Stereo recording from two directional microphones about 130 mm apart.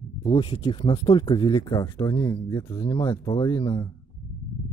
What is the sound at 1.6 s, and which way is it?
Speech, 30° left (ahead or behind).